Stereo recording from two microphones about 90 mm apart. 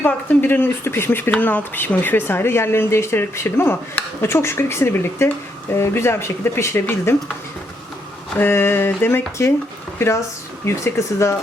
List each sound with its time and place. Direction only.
0.0 s speech: 20° left (ahead or behind)
8.4 s speech: 25° left (ahead or behind)